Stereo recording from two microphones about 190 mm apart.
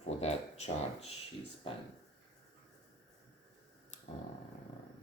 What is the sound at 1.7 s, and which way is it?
Speech, 30° left (ahead or behind).